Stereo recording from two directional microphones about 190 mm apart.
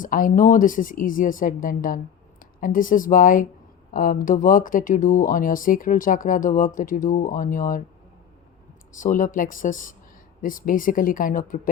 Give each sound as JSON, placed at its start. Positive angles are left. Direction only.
{"t": 0.0, "sound": "speech", "side_deg": 45}
{"t": 9.0, "sound": "speech", "side_deg": 45}